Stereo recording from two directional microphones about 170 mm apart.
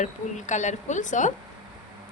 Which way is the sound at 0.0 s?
45° left (ahead or behind).